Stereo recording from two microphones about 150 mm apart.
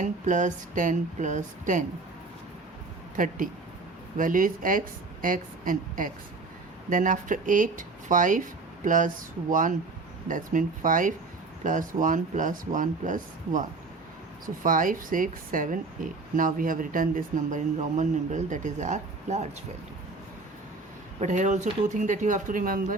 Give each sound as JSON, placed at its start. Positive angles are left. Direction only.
{"t": 0.0, "sound": "speech", "side_deg": -55}
{"t": 3.2, "sound": "speech", "side_deg": -65}
{"t": 21.2, "sound": "speech", "side_deg": -55}